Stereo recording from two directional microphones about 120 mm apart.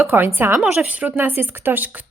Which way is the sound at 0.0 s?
20° right (ahead or behind).